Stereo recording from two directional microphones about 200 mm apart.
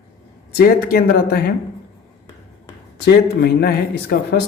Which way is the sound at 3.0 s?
55° left (ahead or behind).